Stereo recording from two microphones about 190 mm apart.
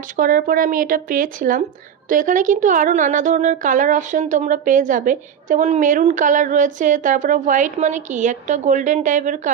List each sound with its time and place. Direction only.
0.1 s speech: 45° right (ahead or behind)